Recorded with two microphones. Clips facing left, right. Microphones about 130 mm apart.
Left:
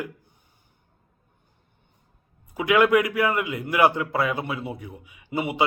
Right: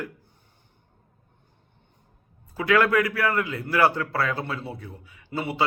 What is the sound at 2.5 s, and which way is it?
A man's voice, 15° left (ahead or behind).